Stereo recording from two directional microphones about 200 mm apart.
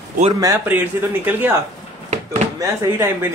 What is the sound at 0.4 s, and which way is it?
Speech, 15° right (ahead or behind).